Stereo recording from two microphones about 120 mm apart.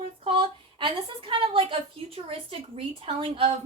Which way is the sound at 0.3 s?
45° right (ahead or behind).